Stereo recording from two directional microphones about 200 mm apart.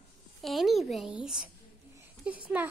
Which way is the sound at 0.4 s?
Centre (ahead or behind).